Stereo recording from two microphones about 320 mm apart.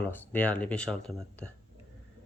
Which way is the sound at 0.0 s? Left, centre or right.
Centre.